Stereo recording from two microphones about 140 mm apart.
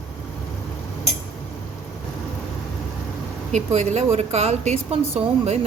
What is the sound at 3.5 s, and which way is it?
A woman's voice, 55° right (ahead or behind).